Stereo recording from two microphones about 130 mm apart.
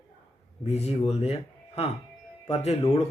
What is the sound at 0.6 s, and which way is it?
Speech, 55° left (ahead or behind).